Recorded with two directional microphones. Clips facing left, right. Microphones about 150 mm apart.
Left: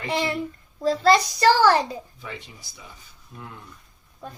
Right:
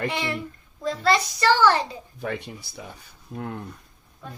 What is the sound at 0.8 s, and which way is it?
Speech, 35° left (ahead or behind).